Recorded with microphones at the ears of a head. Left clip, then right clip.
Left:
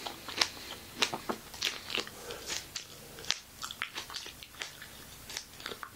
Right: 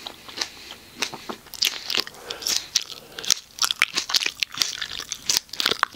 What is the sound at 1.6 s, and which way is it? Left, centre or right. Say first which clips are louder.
Crunch: right 12 dB; right.